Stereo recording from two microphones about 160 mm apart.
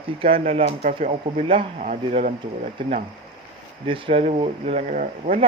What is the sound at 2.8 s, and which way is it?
Speech, 30° right (ahead or behind).